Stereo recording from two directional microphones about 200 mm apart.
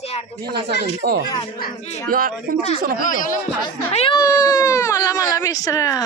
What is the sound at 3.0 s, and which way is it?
Speech, 40° left (ahead or behind).